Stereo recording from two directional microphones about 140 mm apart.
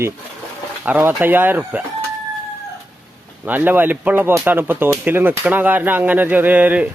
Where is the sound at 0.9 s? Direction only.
10° right (ahead or behind).